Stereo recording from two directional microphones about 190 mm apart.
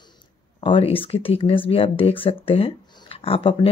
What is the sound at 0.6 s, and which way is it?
Speech, 25° left (ahead or behind).